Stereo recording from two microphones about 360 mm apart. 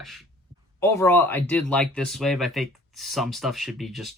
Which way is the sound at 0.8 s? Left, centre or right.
Centre.